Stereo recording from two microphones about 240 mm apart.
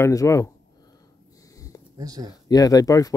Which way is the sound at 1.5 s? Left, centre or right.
Centre.